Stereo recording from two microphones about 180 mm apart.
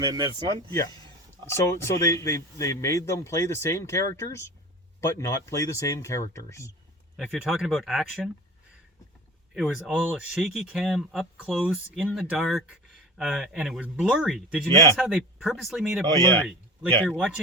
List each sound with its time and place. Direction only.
0.0 s speech: 25° right (ahead or behind)
0.7 s speech: 20° left (ahead or behind)
7.2 s speech: centre (ahead or behind)
9.6 s speech: centre (ahead or behind)
17.2 s speech: 5° right (ahead or behind)